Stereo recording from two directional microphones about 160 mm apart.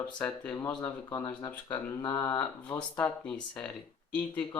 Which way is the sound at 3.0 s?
5° left (ahead or behind).